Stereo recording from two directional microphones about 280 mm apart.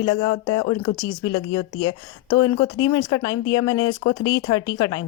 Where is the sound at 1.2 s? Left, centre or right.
Left.